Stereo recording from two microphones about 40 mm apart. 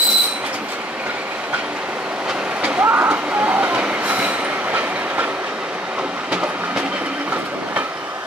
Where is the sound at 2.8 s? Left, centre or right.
Right.